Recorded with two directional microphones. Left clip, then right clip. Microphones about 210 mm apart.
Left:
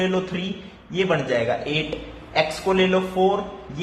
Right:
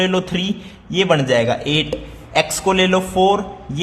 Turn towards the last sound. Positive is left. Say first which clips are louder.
# right 6 dB
turn(degrees=-30)  # may be behind; listen again after turning